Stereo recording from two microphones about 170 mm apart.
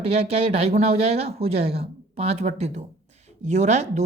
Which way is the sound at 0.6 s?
35° right (ahead or behind).